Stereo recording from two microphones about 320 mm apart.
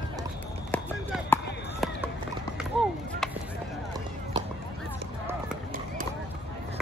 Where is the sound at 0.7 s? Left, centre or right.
Centre.